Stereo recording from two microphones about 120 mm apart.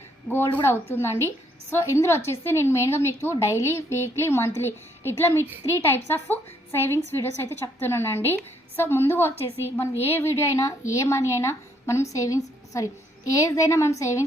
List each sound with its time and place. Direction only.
0.3 s a woman's voice: 20° left (ahead or behind)